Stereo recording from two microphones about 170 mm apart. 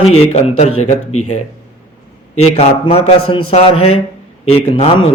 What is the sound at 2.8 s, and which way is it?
A man's voice, 35° left (ahead or behind).